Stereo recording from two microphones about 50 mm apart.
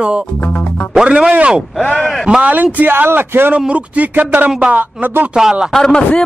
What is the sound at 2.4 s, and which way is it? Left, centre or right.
Speech, right.